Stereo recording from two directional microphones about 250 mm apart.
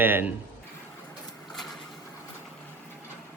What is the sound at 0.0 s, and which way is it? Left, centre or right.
Speech, centre.